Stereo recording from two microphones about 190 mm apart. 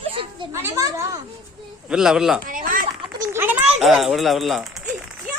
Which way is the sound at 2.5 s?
45° right (ahead or behind).